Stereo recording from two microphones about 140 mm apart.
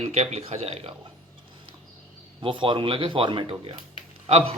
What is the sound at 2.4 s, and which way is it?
Speech, 35° right (ahead or behind).